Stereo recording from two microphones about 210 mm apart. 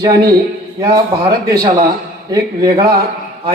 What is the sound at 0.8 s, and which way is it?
A man's voice, 15° right (ahead or behind).